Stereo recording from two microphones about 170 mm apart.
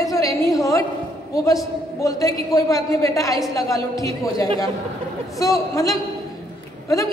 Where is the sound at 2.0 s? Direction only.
20° left (ahead or behind).